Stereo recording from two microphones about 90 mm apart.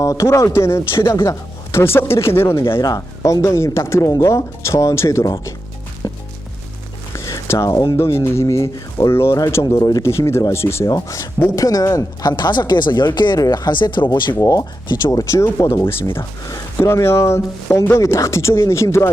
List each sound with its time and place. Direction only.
0.0 s speech: 35° left (ahead or behind)
2.8 s speech: 45° left (ahead or behind)
6.0 s music: 35° left (ahead or behind)
7.1 s a sound: 35° left (ahead or behind)
7.7 s speech: 45° left (ahead or behind)
7.9 s speech: 30° left (ahead or behind)
9.7 s speech: 45° left (ahead or behind)
10.0 s speech: 30° left (ahead or behind)
12.4 s speech: 55° left (ahead or behind)
15.1 s speech: 40° left (ahead or behind)